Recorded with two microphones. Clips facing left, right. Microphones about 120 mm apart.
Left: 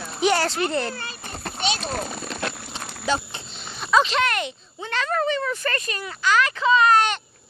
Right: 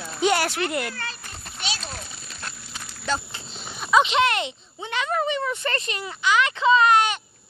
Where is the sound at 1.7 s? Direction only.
55° left (ahead or behind); by 2.7 s 80° left.